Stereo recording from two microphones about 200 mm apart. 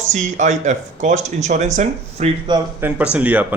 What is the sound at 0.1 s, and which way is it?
Speech, 35° right (ahead or behind).